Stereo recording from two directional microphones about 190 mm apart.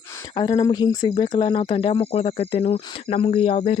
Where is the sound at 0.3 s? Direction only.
20° left (ahead or behind).